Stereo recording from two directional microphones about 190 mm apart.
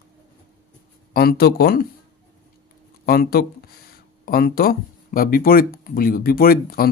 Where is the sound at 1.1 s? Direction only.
55° left (ahead or behind).